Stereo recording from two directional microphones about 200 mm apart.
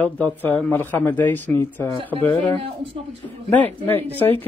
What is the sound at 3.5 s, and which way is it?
Speech, 10° left (ahead or behind).